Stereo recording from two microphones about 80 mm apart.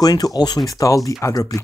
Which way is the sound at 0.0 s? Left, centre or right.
Left.